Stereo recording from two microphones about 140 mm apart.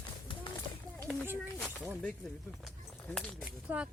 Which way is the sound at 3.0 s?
10° left (ahead or behind).